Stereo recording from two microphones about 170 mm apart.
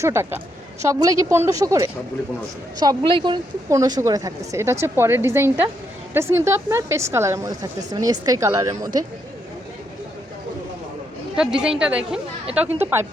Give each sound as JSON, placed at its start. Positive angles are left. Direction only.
{"t": 0.0, "sound": "a woman's voice", "side_deg": -15}
{"t": 11.3, "sound": "speech", "side_deg": -5}